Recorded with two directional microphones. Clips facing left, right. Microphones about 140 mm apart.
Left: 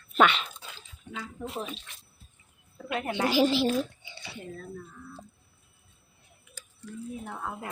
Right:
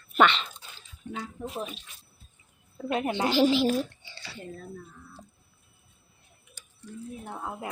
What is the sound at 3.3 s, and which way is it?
Speech, 5° left (ahead or behind).